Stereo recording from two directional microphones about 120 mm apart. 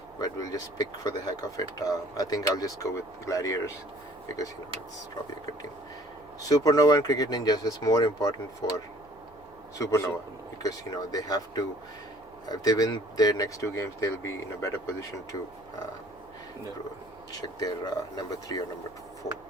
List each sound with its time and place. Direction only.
0.2 s speech: 30° left (ahead or behind)
6.5 s speech: 30° left (ahead or behind)
17.4 s speech: 30° left (ahead or behind)